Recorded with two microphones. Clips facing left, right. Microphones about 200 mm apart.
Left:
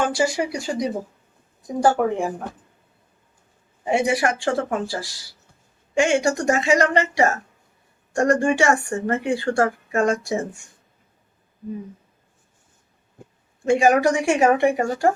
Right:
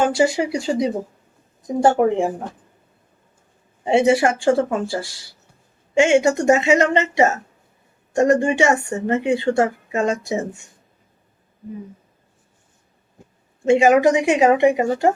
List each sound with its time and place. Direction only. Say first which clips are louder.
0.0 s speech: right 4 dB; 25° right (ahead or behind)
3.8 s speech: right 5 dB; 25° right (ahead or behind)
13.7 s speech: right 3 dB; 20° right (ahead or behind)